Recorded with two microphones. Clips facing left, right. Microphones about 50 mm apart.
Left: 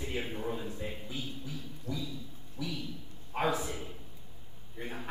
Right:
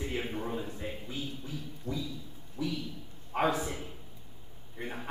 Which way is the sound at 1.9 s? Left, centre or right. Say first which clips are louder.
Right 2 dB; right.